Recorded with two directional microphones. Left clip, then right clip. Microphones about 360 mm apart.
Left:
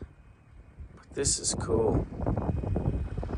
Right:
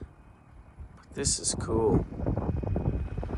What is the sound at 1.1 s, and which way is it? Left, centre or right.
Speech, centre.